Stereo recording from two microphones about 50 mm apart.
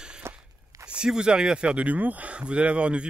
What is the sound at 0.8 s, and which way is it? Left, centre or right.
Speech, centre.